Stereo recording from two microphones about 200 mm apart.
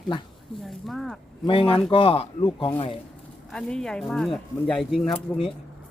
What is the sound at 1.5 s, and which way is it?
Speech, 25° left (ahead or behind).